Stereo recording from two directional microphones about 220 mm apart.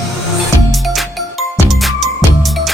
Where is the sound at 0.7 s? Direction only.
Centre (ahead or behind).